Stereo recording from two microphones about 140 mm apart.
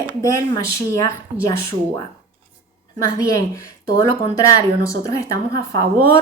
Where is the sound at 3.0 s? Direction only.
25° left (ahead or behind).